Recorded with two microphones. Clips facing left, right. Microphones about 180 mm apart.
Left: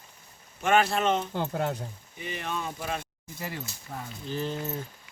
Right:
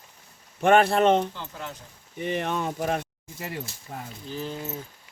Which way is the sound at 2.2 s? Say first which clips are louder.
Right 7 dB; 55° right (ahead or behind).